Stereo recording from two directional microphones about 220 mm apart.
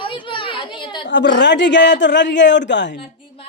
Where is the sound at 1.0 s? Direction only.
55° left (ahead or behind).